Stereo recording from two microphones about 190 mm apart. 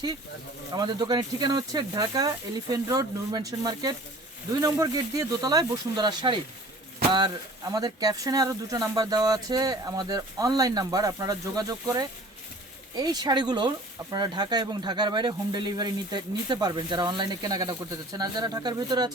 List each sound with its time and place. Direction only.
0.8 s speech: 20° right (ahead or behind)
7.7 s speech: 20° right (ahead or behind)